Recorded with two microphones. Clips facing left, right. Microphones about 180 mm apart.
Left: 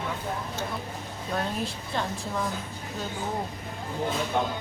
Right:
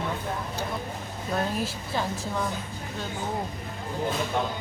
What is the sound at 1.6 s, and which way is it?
Speech, 5° right (ahead or behind).